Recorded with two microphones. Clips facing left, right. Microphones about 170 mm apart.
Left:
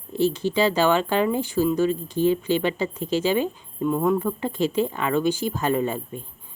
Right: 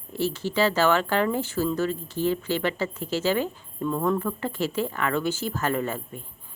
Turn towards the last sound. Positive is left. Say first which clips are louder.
# left 4 dB
turn(degrees=20)  # may be behind; listen again after turning